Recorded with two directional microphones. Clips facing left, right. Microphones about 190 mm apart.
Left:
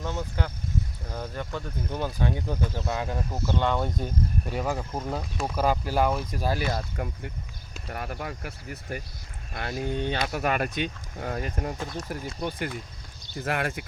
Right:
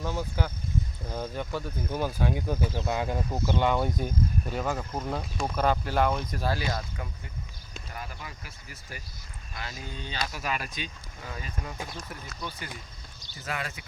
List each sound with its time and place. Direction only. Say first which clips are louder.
0.0 s speech: even; 10° right (ahead or behind); by 6.6 s 10° left (ahead or behind)
6.9 s speech: left 6 dB; 55° left (ahead or behind)
11.9 s speech: left 7 dB; 40° left (ahead or behind)
12.4 s speech: left 8 dB; 55° left (ahead or behind)